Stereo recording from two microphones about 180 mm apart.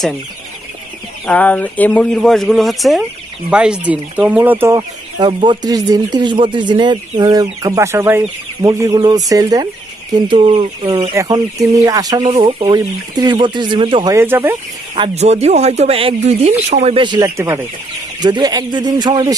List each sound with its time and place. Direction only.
1.2 s speech: 10° left (ahead or behind); by 14.1 s 25° right (ahead or behind)
14.1 s speech: 10° right (ahead or behind)
15.0 s speech: 35° right (ahead or behind)